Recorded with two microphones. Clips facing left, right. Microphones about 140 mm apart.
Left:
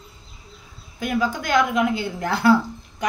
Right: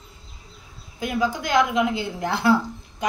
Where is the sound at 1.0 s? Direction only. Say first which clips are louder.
Left 1 dB; 20° right (ahead or behind).